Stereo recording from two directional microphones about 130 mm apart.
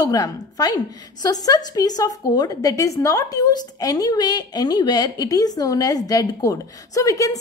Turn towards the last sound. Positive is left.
turn(degrees=25)  # may be behind; listen again after turning